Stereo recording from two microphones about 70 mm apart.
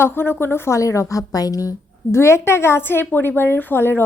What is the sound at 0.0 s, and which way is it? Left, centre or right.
A woman's voice, left.